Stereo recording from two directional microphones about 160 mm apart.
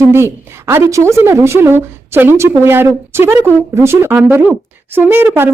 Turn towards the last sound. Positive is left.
turn(degrees=-10)  # may be behind; listen again after turning